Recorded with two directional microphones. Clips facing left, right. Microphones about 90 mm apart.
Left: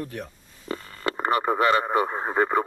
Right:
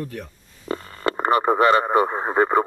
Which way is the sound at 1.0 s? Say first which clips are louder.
Right 4 dB; 35° right (ahead or behind).